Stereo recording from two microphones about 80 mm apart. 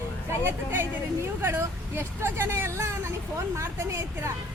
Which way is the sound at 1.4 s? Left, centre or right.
Right.